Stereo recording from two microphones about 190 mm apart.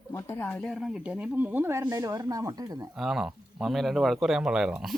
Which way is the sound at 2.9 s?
Centre (ahead or behind).